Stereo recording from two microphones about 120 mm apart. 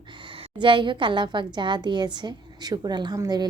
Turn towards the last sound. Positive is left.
turn(degrees=-35)  # may be behind; listen again after turning